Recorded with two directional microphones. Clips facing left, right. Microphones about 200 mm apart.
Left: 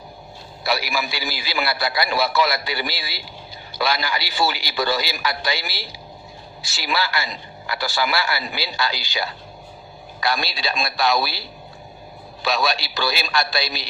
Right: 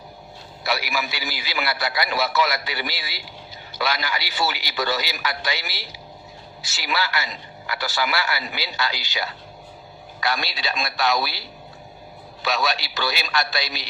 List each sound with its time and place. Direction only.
0.6 s a man's voice: 35° left (ahead or behind)